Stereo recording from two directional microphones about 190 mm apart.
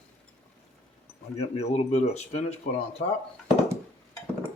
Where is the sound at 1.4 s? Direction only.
35° left (ahead or behind).